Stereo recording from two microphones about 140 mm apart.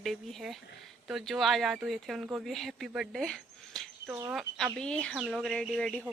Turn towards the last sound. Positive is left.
turn(degrees=5)  # may be behind; listen again after turning